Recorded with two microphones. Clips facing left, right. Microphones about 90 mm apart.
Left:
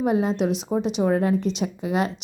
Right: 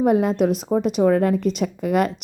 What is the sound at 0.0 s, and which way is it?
A woman's voice, 55° right (ahead or behind).